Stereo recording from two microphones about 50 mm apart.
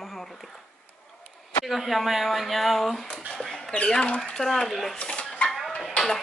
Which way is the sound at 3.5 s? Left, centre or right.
Centre.